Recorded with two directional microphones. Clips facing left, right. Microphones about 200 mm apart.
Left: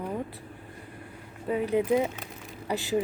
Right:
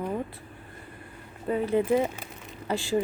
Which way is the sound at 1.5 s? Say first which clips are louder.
Right 1 dB; 10° left (ahead or behind).